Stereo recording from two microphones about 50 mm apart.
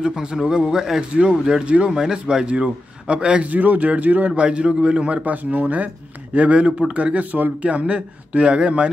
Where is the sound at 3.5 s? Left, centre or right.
Right.